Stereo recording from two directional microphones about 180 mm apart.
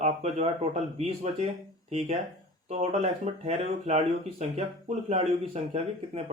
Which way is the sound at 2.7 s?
35° right (ahead or behind).